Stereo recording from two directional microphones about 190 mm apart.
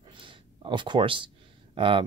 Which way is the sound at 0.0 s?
25° right (ahead or behind).